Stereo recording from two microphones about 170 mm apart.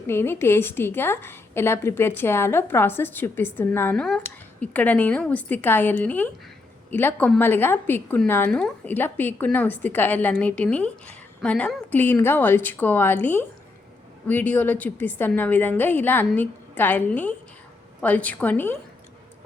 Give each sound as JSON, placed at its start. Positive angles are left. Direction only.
{"t": 0.1, "sound": "speech", "side_deg": 15}